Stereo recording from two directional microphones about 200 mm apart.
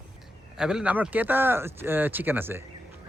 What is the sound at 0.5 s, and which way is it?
Speech, 5° right (ahead or behind).